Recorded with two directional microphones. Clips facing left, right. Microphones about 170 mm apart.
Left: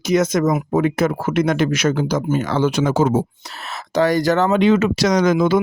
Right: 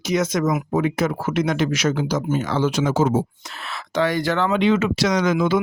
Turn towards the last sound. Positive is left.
turn(degrees=40)  # may be behind; listen again after turning